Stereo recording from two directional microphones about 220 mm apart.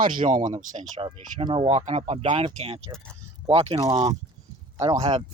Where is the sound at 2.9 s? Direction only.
5° left (ahead or behind).